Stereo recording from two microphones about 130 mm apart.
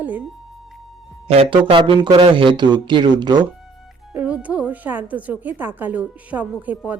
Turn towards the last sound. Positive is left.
turn(degrees=-10)  # may be behind; listen again after turning